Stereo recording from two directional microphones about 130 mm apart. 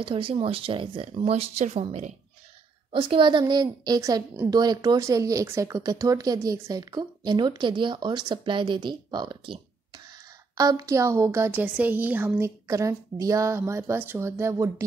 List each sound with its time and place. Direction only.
0.0 s speech: 45° right (ahead or behind)
2.9 s a woman's voice: 40° right (ahead or behind); by 14.7 s 20° right (ahead or behind)